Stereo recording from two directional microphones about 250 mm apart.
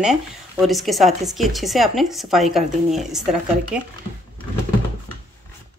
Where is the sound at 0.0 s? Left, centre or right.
Centre.